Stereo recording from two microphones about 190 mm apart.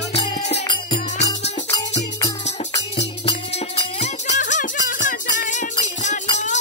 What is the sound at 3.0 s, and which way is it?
Music, 35° left (ahead or behind).